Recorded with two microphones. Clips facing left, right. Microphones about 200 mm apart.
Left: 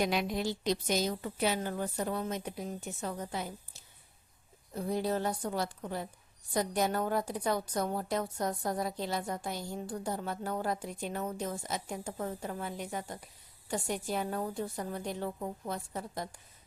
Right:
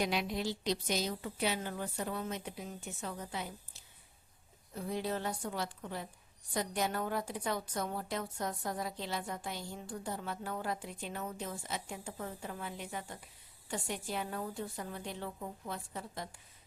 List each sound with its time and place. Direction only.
0.0 s a woman's voice: 50° left (ahead or behind)
4.7 s a woman's voice: 40° left (ahead or behind)